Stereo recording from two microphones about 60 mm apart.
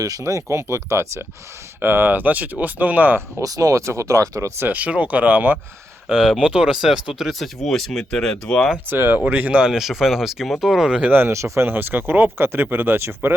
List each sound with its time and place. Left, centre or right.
0.0 s speech: right
1.8 s speech: right
3.4 s speech: right
4.6 s speech: right
6.1 s speech: centre
6.4 s speech: centre
8.9 s speech: right
9.5 s speech: centre
11.1 s speech: right
11.3 s speech: right
11.6 s speech: right